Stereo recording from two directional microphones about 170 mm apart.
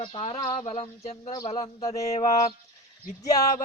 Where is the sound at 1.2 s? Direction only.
20° left (ahead or behind).